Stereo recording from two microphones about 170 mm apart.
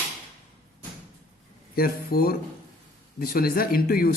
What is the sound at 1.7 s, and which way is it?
A woman's voice, 60° left (ahead or behind).